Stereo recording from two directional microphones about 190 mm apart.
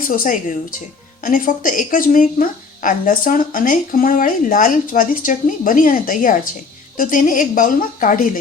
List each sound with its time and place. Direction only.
0.1 s a woman's voice: 45° left (ahead or behind)